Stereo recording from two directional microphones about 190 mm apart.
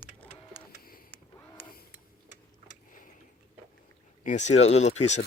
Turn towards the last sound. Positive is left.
turn(degrees=35)  # may be behind; listen again after turning